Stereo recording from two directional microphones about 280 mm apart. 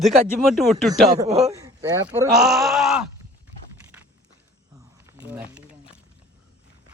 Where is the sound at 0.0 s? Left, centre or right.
Centre.